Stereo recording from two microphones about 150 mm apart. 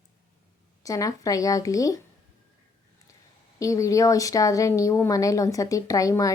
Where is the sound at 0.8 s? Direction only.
25° left (ahead or behind).